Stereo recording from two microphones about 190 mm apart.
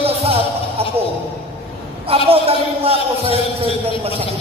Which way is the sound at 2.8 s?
30° right (ahead or behind).